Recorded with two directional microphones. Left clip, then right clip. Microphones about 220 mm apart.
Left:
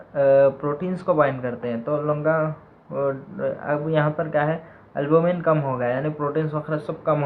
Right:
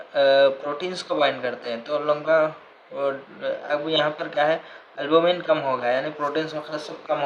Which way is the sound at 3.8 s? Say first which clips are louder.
Even; 25° right (ahead or behind).